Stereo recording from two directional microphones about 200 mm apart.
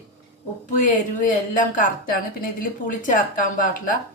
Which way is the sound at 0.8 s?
40° left (ahead or behind).